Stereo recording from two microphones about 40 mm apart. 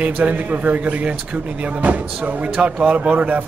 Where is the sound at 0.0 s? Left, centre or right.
Right.